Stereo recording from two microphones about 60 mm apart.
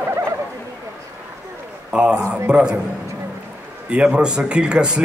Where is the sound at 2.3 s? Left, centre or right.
Centre.